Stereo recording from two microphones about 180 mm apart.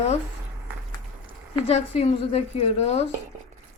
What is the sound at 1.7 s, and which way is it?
A woman's voice, 35° left (ahead or behind).